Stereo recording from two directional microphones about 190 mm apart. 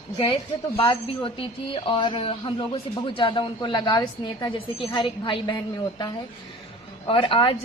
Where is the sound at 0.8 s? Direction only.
25° left (ahead or behind).